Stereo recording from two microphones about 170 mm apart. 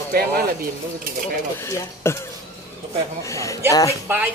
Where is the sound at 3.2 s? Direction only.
20° left (ahead or behind).